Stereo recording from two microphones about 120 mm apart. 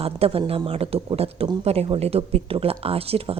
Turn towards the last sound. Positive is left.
turn(degrees=-55)  # may be behind; listen again after turning